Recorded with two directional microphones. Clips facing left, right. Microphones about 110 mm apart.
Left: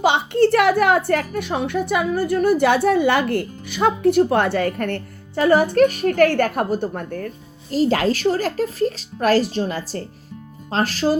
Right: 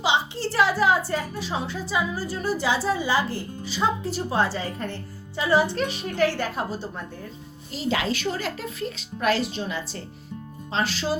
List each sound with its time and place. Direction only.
0.0 s a woman's voice: 55° left (ahead or behind)
7.7 s speech: 45° left (ahead or behind)